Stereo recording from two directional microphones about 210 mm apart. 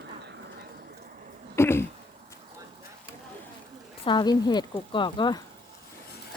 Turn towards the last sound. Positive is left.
turn(degrees=20)  # may be behind; listen again after turning